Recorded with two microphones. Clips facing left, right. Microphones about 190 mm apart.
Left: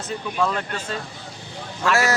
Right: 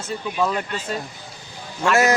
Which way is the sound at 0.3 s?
5° right (ahead or behind).